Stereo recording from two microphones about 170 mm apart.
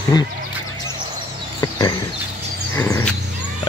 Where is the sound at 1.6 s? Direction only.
25° left (ahead or behind).